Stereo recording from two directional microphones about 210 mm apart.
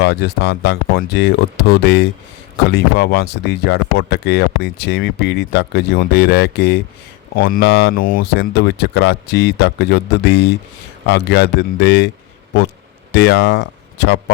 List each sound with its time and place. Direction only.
0.0 s speech: 50° left (ahead or behind)